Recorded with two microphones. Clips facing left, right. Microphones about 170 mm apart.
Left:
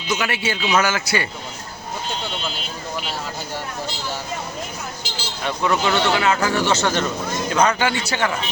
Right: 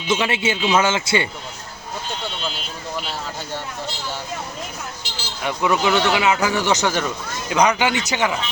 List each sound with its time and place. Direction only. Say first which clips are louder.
0.1 s a man's voice: right 3 dB; 25° right (ahead or behind)
5.5 s speech: right 1 dB; 15° right (ahead or behind)